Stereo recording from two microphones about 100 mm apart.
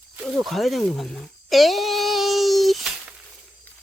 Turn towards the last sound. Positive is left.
turn(degrees=0)  # may be behind; listen again after turning